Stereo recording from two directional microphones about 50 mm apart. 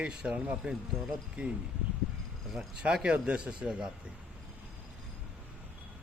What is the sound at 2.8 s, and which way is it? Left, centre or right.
Speech, right.